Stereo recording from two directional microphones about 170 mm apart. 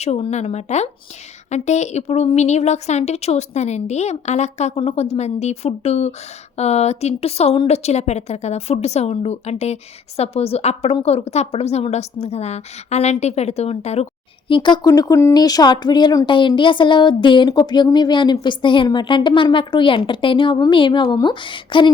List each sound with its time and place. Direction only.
0.0 s a woman's voice: 40° left (ahead or behind)